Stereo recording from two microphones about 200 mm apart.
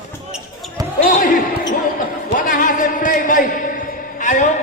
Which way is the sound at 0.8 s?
20° right (ahead or behind).